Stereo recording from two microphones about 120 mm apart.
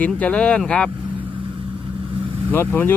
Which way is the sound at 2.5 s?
15° left (ahead or behind).